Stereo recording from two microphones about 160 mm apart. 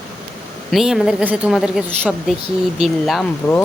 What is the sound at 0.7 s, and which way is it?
Speech, centre (ahead or behind).